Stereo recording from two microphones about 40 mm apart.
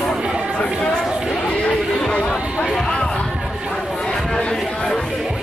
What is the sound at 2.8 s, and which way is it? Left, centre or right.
Chatter, left.